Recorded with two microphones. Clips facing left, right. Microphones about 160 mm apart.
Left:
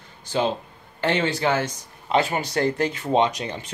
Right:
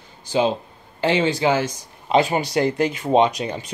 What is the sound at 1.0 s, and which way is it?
Speech, 10° right (ahead or behind).